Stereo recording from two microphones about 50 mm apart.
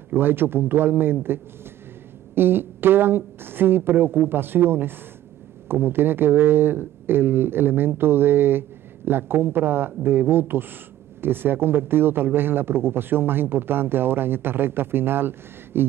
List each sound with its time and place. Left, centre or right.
0.1 s speech: right